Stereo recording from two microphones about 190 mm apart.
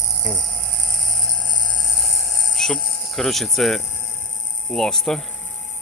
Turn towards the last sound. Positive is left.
turn(degrees=5)  # may be behind; listen again after turning